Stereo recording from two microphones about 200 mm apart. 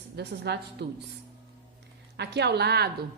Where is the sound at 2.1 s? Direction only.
55° right (ahead or behind).